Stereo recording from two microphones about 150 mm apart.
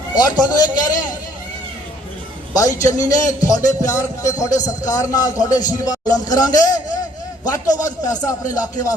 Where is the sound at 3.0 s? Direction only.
25° left (ahead or behind).